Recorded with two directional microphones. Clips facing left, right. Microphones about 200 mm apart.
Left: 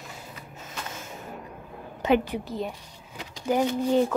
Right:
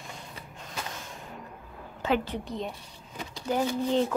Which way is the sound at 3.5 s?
15° left (ahead or behind).